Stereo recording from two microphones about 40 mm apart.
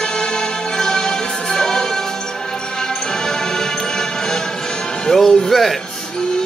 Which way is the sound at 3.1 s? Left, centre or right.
Centre.